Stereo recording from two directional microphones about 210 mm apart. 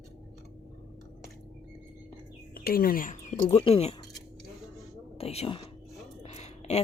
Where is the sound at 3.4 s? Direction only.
30° left (ahead or behind).